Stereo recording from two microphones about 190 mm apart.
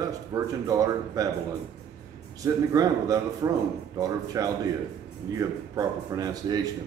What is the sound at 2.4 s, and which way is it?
A man's voice, 20° right (ahead or behind).